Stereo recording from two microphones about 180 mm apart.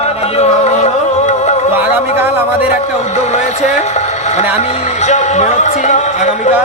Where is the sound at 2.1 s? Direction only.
10° right (ahead or behind).